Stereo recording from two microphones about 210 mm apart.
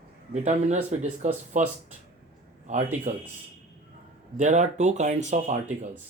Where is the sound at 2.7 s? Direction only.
35° right (ahead or behind).